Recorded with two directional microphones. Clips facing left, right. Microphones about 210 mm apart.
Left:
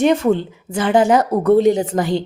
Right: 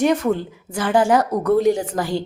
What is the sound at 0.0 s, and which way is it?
A woman's voice, 25° left (ahead or behind).